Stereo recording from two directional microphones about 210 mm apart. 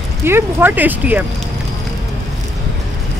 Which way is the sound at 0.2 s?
10° right (ahead or behind).